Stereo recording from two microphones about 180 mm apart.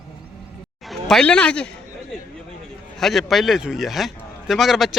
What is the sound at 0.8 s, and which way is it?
Speech, centre (ahead or behind).